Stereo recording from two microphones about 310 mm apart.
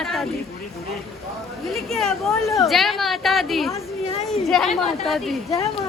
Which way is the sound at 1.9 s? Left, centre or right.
Centre.